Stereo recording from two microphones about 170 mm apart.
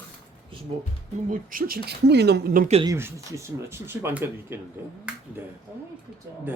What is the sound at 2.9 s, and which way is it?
Speech, 15° right (ahead or behind).